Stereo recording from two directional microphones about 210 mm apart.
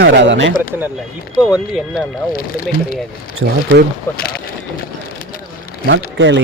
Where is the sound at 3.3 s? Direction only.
55° right (ahead or behind).